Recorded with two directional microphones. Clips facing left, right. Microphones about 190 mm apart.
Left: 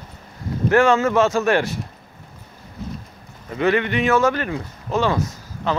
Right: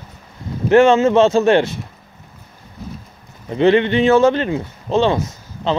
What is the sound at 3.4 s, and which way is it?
Speech, 25° right (ahead or behind).